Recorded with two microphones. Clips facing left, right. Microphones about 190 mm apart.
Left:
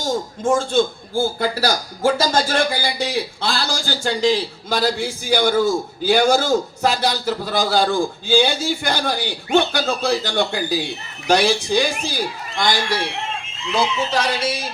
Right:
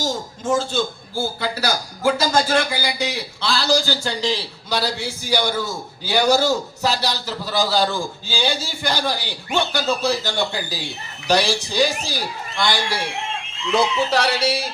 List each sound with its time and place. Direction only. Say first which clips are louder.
0.0 s a man's voice: left 4 dB; 50° left (ahead or behind)
14.1 s speech: right 1 dB; 70° right (ahead or behind)